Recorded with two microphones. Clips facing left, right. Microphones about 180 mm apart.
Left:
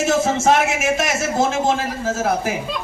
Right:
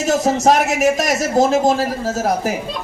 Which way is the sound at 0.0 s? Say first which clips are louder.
Right 2 dB; 40° right (ahead or behind).